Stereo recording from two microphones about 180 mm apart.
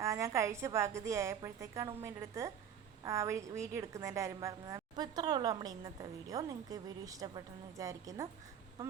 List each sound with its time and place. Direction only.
0.0 s a woman's voice: 15° right (ahead or behind)